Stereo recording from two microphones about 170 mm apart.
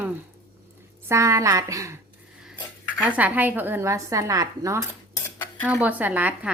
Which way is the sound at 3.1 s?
10° right (ahead or behind).